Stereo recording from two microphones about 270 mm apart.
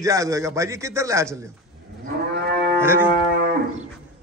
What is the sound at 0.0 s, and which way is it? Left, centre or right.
A man's voice, centre.